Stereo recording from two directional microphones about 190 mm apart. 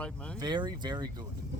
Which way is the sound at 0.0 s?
5° left (ahead or behind).